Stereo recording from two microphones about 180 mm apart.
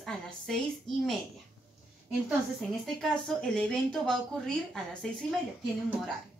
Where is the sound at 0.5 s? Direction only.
Centre (ahead or behind).